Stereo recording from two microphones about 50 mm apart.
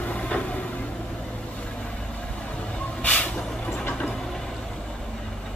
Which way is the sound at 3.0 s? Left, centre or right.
Left.